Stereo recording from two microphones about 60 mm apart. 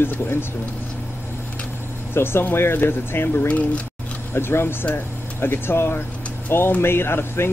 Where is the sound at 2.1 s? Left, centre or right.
Left.